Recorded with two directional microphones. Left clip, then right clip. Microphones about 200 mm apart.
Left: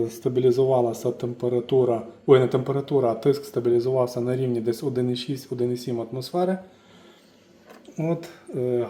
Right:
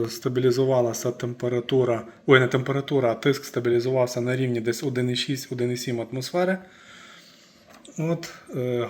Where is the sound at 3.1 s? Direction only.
25° right (ahead or behind).